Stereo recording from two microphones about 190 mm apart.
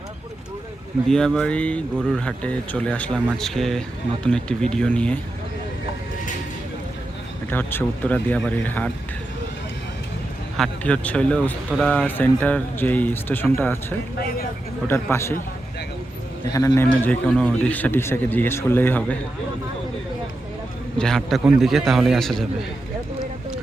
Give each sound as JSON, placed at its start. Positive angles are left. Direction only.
{"t": 1.0, "sound": "speech", "side_deg": 0}
{"t": 7.5, "sound": "speech", "side_deg": 10}
{"t": 10.6, "sound": "speech", "side_deg": 5}
{"t": 16.5, "sound": "speech", "side_deg": 15}
{"t": 21.0, "sound": "speech", "side_deg": 0}